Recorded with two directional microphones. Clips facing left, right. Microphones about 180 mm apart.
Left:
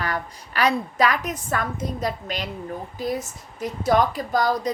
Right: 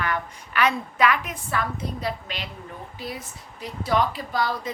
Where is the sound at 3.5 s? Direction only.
45° left (ahead or behind).